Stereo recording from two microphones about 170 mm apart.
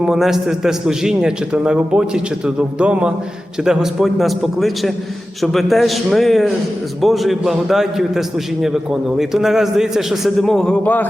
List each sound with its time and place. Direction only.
0.0 s a man's voice: centre (ahead or behind)